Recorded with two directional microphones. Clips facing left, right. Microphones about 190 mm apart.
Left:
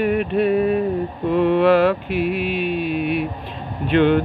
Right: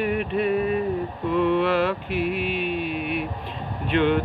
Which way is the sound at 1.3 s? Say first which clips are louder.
Left 6 dB; 45° left (ahead or behind).